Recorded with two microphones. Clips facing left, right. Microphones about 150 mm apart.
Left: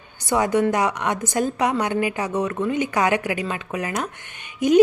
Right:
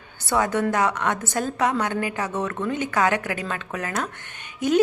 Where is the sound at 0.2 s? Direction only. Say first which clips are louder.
Left 3 dB; 15° left (ahead or behind).